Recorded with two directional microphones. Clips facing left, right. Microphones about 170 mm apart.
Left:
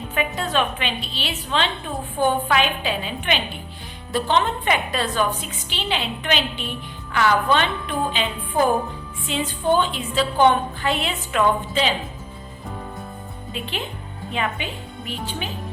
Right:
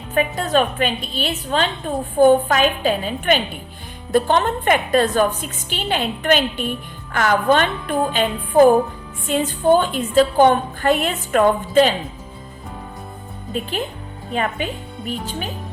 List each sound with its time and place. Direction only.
0.1 s a woman's voice: 45° right (ahead or behind)
13.5 s a woman's voice: 45° right (ahead or behind)